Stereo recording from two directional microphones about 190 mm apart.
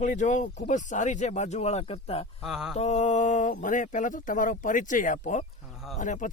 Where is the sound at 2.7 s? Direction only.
35° left (ahead or behind).